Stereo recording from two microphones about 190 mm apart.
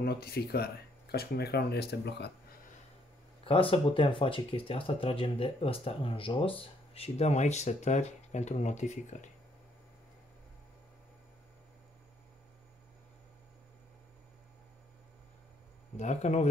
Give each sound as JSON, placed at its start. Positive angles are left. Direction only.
{"t": 0.0, "sound": "speech", "side_deg": 55}
{"t": 3.4, "sound": "speech", "side_deg": 30}
{"t": 16.0, "sound": "speech", "side_deg": 35}